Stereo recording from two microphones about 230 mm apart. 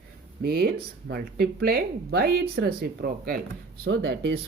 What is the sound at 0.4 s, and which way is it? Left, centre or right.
Speech, right.